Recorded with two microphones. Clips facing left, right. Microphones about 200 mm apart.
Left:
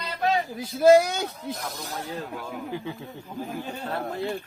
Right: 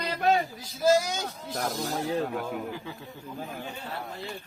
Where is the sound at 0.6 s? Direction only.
60° left (ahead or behind).